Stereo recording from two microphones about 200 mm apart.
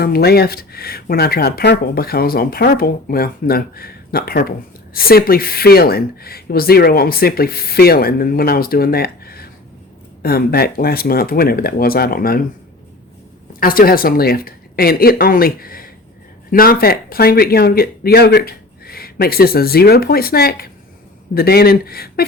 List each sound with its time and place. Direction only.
0.0 s speech: 50° left (ahead or behind)
13.6 s speech: 45° left (ahead or behind)